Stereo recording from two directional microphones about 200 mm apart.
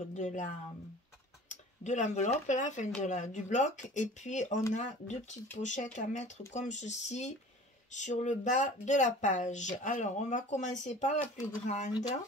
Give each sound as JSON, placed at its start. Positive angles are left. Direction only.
{"t": 0.1, "sound": "speech", "side_deg": 40}
{"t": 1.5, "sound": "speech", "side_deg": 35}